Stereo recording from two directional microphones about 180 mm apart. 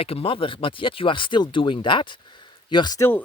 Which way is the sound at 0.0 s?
30° left (ahead or behind).